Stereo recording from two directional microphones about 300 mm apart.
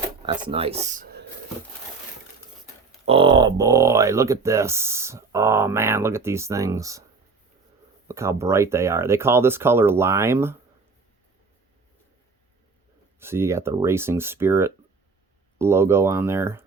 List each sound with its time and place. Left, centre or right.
0.3 s speech: centre
3.1 s speech: centre
8.0 s speech: centre
13.1 s speech: centre